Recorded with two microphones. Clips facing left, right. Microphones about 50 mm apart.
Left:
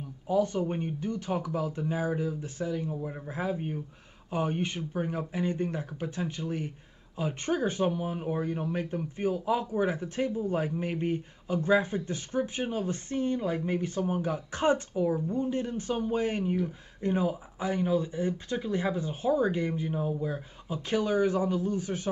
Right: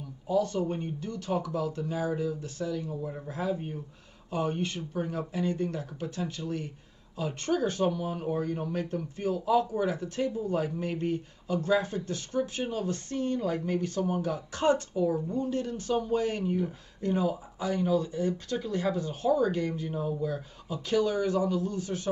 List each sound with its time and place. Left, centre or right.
0.3 s speech: left